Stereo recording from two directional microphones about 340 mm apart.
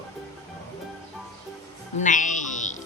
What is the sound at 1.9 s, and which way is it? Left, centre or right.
Music, left.